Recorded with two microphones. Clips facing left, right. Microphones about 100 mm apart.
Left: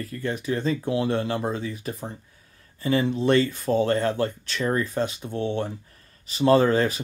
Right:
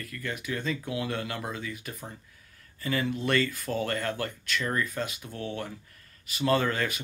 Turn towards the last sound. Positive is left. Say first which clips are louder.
# left 8 dB
turn(degrees=30)  # may be behind; listen again after turning